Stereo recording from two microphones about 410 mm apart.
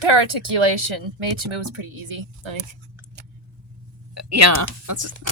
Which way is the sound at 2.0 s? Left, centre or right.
Right.